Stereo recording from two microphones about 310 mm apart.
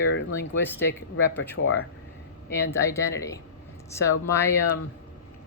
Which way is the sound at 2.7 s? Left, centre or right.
Centre.